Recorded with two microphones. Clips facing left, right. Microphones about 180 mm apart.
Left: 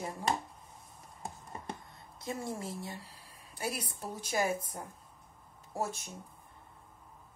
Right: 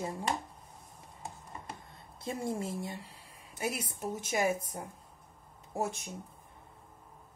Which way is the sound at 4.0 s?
15° right (ahead or behind).